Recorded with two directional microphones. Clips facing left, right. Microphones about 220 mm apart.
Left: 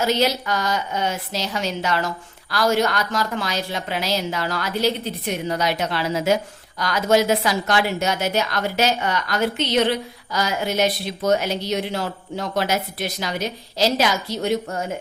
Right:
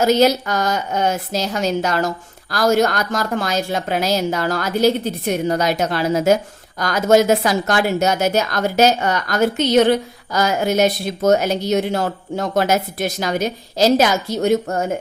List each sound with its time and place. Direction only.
0.0 s a woman's voice: 45° right (ahead or behind)